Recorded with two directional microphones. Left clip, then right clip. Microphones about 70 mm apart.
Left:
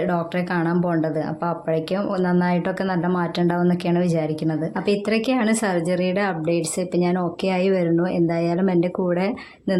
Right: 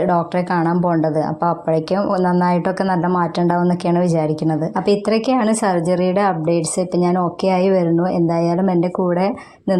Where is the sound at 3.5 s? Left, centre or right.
Right.